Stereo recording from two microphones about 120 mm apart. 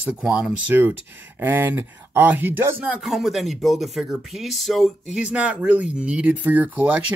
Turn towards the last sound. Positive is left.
turn(degrees=-15)  # may be behind; listen again after turning